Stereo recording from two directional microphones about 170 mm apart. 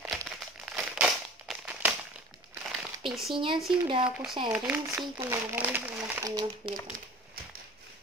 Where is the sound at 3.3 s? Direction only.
30° right (ahead or behind).